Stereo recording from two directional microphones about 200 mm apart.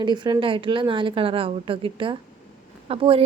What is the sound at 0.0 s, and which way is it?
A woman's voice, 20° right (ahead or behind).